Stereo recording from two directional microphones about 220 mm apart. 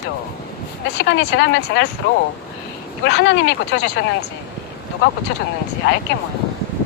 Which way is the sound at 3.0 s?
55° left (ahead or behind).